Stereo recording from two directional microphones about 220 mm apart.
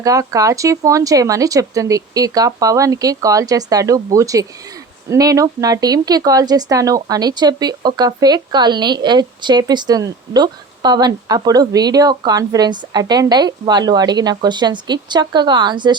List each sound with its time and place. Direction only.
0.0 s speech: 15° right (ahead or behind)